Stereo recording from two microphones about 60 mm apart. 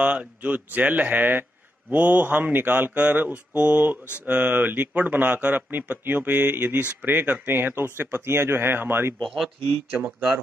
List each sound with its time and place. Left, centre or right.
0.0 s speech: right
5.7 s speech: right
9.2 s speech: centre
9.9 s speech: right